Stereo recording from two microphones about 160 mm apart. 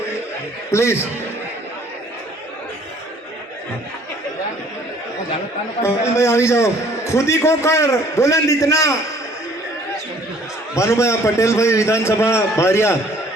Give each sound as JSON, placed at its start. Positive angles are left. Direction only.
{"t": 0.7, "sound": "a man's voice", "side_deg": 15}
{"t": 6.1, "sound": "a man's voice", "side_deg": 15}
{"t": 10.8, "sound": "a man's voice", "side_deg": 15}